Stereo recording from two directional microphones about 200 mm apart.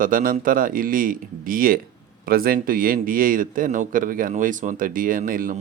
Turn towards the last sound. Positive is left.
turn(degrees=-45)  # may be behind; listen again after turning